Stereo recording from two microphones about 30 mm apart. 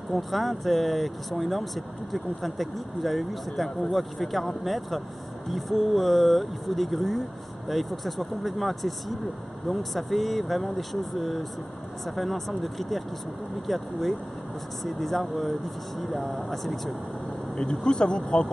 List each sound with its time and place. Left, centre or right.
0.1 s speech: centre
14.9 s speech: centre
17.6 s speech: left